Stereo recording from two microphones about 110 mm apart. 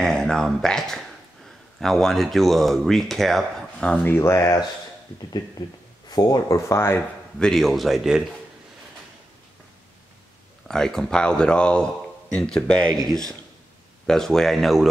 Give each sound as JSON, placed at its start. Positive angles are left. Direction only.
{"t": 0.0, "sound": "speech", "side_deg": 5}
{"t": 4.1, "sound": "speech", "side_deg": 25}
{"t": 5.6, "sound": "speech", "side_deg": 35}
{"t": 7.3, "sound": "speech", "side_deg": 5}
{"t": 10.7, "sound": "a man's voice", "side_deg": 5}